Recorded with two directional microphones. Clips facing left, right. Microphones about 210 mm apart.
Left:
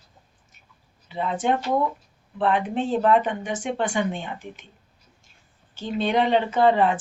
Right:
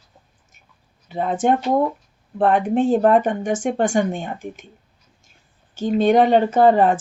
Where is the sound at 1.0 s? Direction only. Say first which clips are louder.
Right 5 dB; 50° right (ahead or behind).